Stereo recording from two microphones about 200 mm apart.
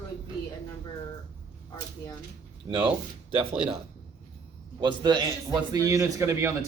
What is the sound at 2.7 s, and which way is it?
Speech, 20° right (ahead or behind).